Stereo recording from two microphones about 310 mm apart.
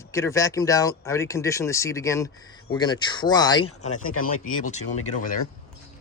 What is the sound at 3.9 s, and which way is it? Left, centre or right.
Speech, left.